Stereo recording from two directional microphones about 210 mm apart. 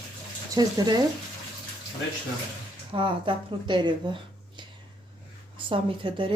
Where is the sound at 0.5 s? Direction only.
20° right (ahead or behind).